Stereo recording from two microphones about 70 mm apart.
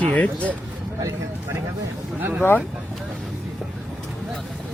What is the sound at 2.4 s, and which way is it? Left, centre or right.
Speech, left.